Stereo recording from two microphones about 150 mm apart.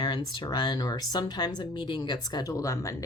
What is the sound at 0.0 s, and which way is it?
Speech, 30° left (ahead or behind).